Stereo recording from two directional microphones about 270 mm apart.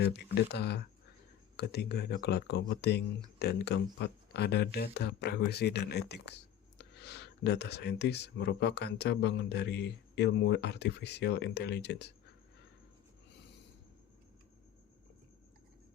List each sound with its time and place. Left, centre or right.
0.0 s speech: left